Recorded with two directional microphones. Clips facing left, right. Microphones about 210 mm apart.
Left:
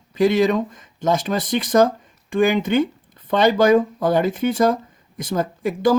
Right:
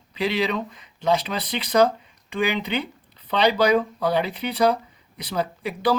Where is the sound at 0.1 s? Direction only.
45° left (ahead or behind).